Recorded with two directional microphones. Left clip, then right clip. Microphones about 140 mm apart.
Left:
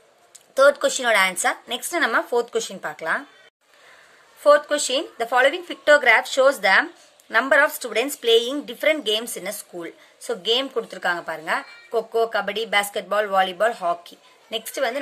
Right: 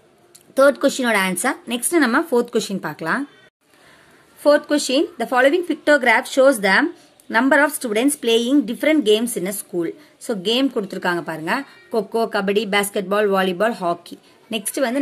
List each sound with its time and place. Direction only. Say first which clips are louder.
0.6 s speech: right 2 dB; 15° right (ahead or behind)
4.4 s speech: even; 15° right (ahead or behind)